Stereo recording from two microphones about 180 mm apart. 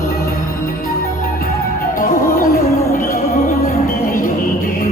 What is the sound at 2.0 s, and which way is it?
Music, 50° left (ahead or behind).